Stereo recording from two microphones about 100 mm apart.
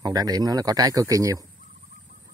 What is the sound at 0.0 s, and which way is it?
Speech, 40° right (ahead or behind).